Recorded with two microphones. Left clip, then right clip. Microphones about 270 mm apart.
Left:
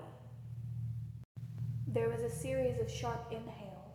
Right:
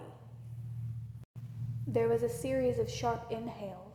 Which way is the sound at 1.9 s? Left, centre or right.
Right.